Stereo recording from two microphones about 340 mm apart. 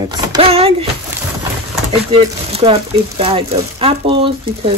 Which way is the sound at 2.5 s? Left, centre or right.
Centre.